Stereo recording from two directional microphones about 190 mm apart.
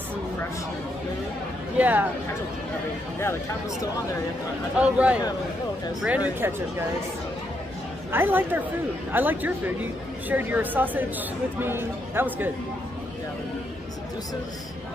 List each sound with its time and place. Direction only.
1.8 s speech: 10° right (ahead or behind)
4.7 s speech: 5° right (ahead or behind)
8.1 s speech: 10° right (ahead or behind)